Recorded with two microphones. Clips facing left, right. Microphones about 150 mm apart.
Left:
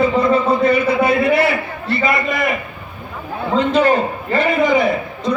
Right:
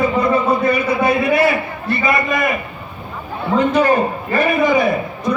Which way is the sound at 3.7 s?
25° left (ahead or behind).